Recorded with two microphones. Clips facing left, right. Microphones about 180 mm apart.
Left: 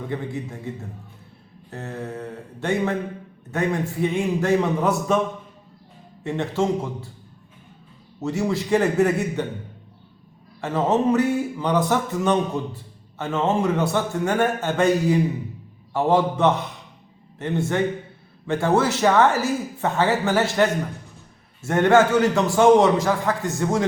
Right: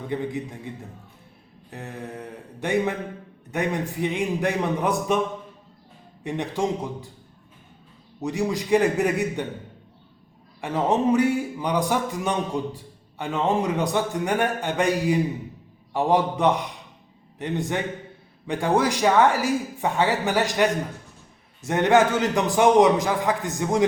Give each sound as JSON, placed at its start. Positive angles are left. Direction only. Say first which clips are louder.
{"t": 0.1, "sound": "a man's voice", "louder": "right 4 dB", "side_deg": -15}
{"t": 1.7, "sound": "a man's voice", "louder": "left 4 dB", "side_deg": -15}
{"t": 6.2, "sound": "a man's voice", "louder": "left 3 dB", "side_deg": -15}
{"t": 8.2, "sound": "a man's voice", "louder": "left 2 dB", "side_deg": -15}
{"t": 10.6, "sound": "a man's voice", "louder": "left 2 dB", "side_deg": -15}